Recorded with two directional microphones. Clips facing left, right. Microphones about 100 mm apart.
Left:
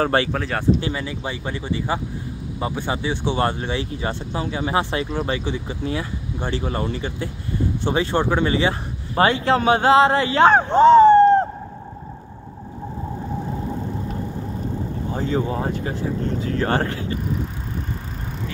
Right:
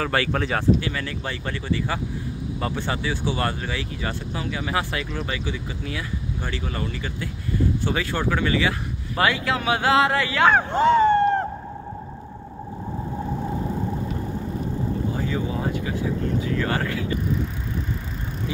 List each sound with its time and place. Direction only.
0.0 s speech: 30° left (ahead or behind)
0.3 s speech: centre (ahead or behind)
0.7 s speech: 25° left (ahead or behind)
1.0 s speech: 15° left (ahead or behind)
15.1 s speech: 35° left (ahead or behind)